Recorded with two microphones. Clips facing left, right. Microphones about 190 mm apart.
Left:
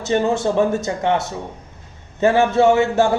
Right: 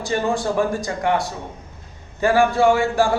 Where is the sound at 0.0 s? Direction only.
20° left (ahead or behind).